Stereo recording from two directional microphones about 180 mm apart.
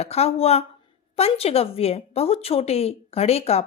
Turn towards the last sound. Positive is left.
turn(degrees=35)  # may be behind; listen again after turning